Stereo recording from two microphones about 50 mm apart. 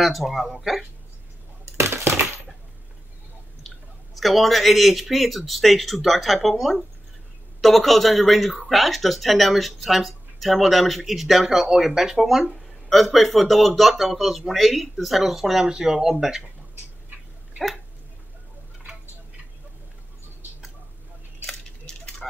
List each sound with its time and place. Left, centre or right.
0.0 s speech: centre
1.9 s coin: right
4.1 s speech: centre
21.5 s a sound: centre